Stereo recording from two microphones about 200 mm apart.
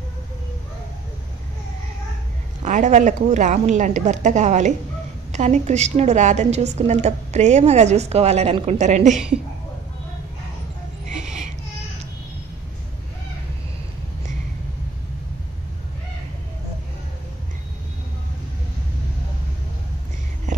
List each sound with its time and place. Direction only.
2.6 s a woman's voice: 35° right (ahead or behind)